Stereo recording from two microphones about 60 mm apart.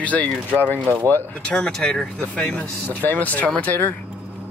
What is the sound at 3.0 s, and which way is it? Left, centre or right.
Speech, left.